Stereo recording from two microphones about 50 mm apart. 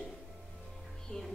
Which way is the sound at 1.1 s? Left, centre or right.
Centre.